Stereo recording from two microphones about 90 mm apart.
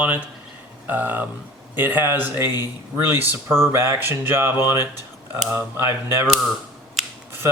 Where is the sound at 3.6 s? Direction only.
25° right (ahead or behind).